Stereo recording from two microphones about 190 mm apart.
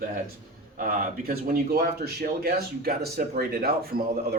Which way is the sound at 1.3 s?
55° right (ahead or behind).